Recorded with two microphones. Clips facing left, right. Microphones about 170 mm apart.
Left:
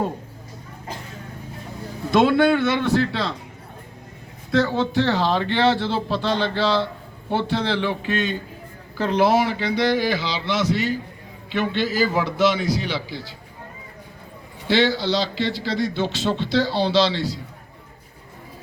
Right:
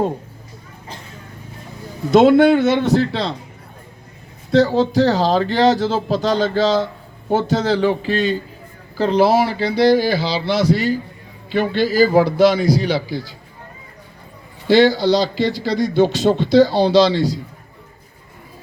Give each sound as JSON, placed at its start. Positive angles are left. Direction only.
{"t": 2.3, "sound": "speech", "side_deg": -40}
{"t": 4.5, "sound": "speech", "side_deg": -35}
{"t": 14.7, "sound": "speech", "side_deg": -40}